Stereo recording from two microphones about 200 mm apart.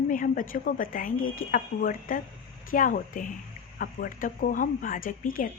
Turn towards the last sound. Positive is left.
turn(degrees=45)  # may be behind; listen again after turning